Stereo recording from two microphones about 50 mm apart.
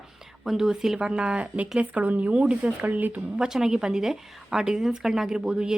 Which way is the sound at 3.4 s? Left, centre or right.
Centre.